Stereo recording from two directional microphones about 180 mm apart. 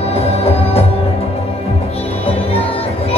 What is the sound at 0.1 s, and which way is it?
Music, 35° left (ahead or behind).